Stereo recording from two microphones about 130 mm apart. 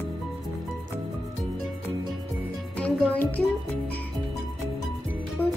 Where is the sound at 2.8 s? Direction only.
10° left (ahead or behind).